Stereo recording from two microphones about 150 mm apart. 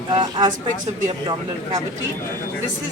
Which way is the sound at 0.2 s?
30° right (ahead or behind).